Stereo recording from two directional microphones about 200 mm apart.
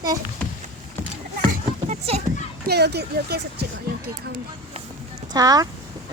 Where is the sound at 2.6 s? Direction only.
55° right (ahead or behind).